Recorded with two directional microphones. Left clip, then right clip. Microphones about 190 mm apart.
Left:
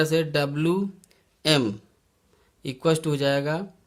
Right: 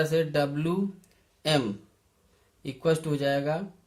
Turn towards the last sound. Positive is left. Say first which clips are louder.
# left 3 dB
turn(degrees=50)  # may be behind; listen again after turning